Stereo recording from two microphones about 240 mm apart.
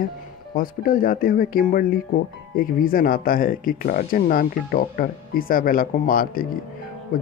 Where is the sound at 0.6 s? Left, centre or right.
Left.